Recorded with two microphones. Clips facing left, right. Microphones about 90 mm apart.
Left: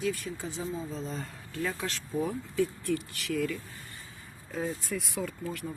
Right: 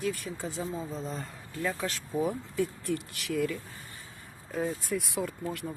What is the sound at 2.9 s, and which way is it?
Speech, 15° right (ahead or behind).